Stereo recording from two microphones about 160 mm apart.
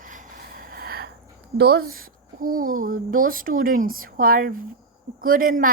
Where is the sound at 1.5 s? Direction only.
85° right.